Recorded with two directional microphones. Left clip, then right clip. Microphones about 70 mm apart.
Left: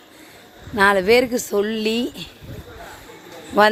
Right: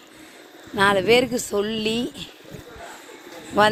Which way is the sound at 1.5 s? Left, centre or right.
Left.